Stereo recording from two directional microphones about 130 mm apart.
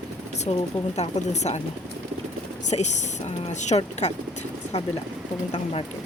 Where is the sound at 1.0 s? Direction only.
60° left (ahead or behind).